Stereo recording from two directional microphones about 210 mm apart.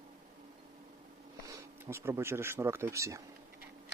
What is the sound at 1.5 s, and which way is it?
Speech, 10° right (ahead or behind).